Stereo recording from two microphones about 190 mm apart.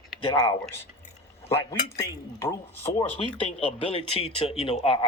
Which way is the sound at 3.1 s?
30° left (ahead or behind).